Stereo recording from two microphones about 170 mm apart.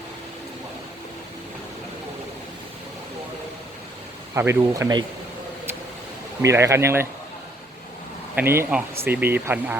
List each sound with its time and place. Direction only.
4.4 s speech: 15° right (ahead or behind)
6.4 s speech: 15° right (ahead or behind)
8.4 s speech: 10° right (ahead or behind)